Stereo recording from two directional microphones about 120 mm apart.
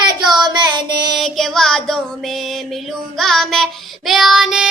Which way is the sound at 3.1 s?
Centre (ahead or behind).